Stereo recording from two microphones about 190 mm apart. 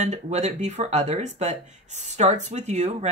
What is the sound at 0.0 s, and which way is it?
Speech, 35° right (ahead or behind).